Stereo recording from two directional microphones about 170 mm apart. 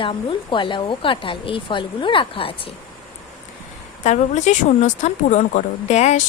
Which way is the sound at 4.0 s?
45° left (ahead or behind).